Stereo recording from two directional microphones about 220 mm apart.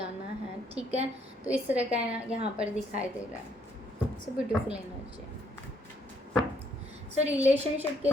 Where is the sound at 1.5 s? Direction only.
5° right (ahead or behind).